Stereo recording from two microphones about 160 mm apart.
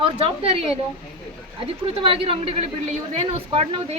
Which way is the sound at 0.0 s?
35° right (ahead or behind).